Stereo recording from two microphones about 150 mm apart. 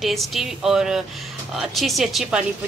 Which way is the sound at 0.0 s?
Centre (ahead or behind).